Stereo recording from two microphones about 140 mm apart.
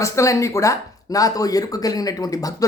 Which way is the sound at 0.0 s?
20° left (ahead or behind).